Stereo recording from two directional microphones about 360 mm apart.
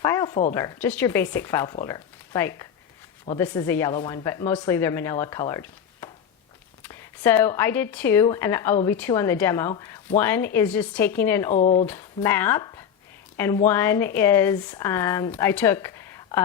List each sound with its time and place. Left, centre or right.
0.0 s speech: centre
11.5 s speech: centre
11.9 s a woman's voice: centre